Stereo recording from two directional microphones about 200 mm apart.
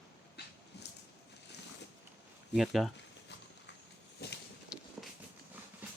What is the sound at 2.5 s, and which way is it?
Speech, centre (ahead or behind).